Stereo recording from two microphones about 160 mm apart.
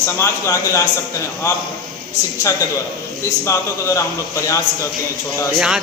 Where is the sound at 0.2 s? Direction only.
20° left (ahead or behind).